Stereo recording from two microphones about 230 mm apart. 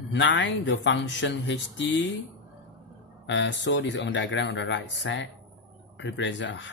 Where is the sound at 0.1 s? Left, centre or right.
Left.